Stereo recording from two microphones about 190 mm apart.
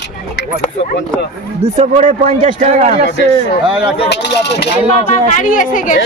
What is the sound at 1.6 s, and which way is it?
Speech, 35° right (ahead or behind).